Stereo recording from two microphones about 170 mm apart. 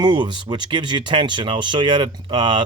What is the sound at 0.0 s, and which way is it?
Speech, 25° right (ahead or behind).